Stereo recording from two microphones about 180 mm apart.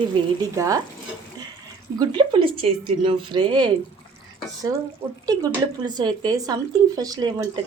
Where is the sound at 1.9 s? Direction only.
25° right (ahead or behind).